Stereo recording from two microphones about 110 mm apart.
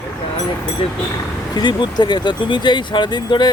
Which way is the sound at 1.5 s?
40° left (ahead or behind).